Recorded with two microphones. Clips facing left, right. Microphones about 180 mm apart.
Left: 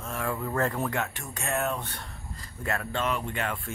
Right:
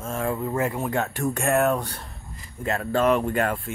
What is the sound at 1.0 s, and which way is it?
Speech, 40° right (ahead or behind).